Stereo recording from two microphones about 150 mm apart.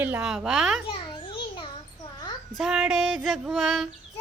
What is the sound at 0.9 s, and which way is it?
Babbling, 35° left (ahead or behind).